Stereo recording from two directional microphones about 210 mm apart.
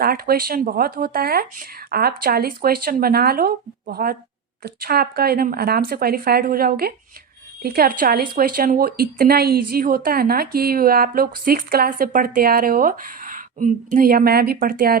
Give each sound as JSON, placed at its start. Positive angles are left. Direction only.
{"t": 0.0, "sound": "speech", "side_deg": -45}